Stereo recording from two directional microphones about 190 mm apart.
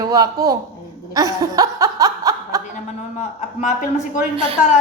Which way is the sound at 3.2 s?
40° left (ahead or behind).